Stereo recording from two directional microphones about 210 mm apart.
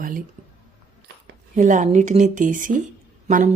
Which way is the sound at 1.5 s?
35° right (ahead or behind).